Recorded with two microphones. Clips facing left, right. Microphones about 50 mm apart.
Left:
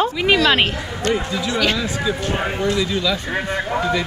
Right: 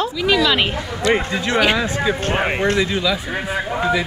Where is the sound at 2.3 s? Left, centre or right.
Right.